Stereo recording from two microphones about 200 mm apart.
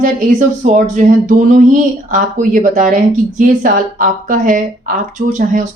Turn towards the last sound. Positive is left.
turn(degrees=-35)  # may be behind; listen again after turning